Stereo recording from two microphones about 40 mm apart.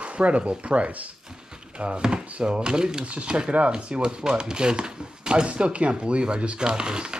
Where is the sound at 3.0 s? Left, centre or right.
Right.